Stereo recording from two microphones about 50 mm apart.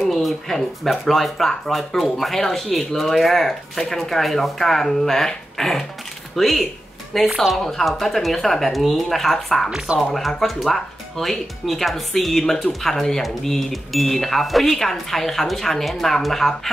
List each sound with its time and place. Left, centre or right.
0.1 s speech: centre